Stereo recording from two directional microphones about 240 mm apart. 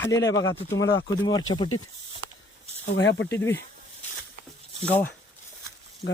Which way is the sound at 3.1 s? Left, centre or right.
Centre.